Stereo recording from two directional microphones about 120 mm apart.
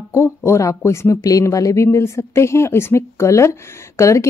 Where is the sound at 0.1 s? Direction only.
20° left (ahead or behind).